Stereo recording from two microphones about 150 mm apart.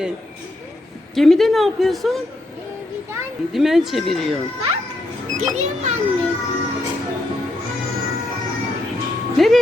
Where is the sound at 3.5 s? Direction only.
Centre (ahead or behind).